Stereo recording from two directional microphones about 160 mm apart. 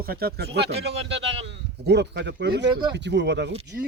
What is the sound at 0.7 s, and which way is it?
Speech, 40° right (ahead or behind).